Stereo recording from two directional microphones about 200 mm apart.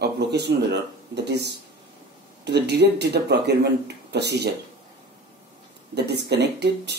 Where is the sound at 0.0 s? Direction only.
55° right (ahead or behind).